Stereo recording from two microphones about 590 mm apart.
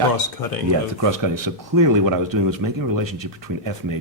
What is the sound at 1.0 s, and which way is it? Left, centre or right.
Speech, right.